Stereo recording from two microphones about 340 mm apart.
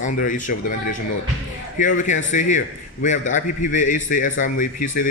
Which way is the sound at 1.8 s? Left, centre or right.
Left.